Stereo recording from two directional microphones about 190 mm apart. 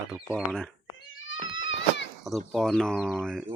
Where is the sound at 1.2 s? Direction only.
90° left.